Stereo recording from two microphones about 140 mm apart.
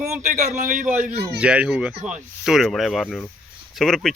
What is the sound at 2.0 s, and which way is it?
Speech, 60° right (ahead or behind).